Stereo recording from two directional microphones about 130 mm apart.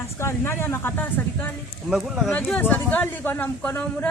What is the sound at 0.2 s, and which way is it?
Speech, 20° left (ahead or behind).